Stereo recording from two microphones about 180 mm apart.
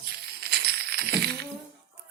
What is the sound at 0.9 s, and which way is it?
Music, 65° right (ahead or behind).